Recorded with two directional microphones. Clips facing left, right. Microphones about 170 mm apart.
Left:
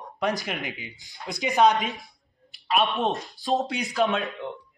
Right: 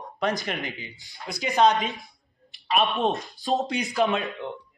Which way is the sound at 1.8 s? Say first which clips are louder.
Even; centre (ahead or behind).